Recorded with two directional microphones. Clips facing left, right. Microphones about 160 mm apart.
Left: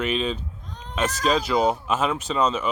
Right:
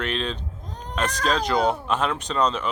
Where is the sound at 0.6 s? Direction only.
40° right (ahead or behind).